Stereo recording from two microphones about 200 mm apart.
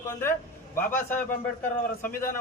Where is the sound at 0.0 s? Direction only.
15° left (ahead or behind).